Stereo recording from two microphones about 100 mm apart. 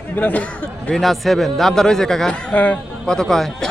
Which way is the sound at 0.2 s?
15° left (ahead or behind).